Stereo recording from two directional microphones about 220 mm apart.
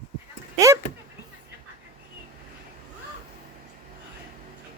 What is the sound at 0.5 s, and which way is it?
Speech, 15° right (ahead or behind).